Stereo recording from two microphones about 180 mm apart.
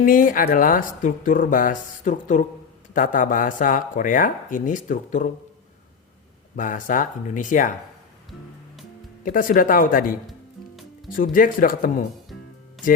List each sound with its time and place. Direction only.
0.0 s speech: 50° left (ahead or behind)
6.6 s speech: 45° left (ahead or behind)
9.2 s speech: 50° left (ahead or behind)
11.2 s speech: 50° left (ahead or behind)